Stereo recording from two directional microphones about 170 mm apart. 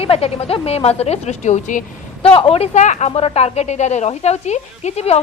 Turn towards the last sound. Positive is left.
turn(degrees=40)  # may be behind; listen again after turning